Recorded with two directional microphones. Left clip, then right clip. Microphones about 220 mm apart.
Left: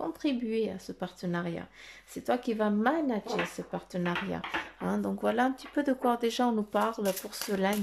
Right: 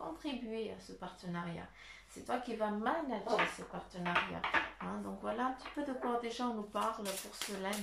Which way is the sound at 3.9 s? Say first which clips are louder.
Left 2 dB; 50° left (ahead or behind).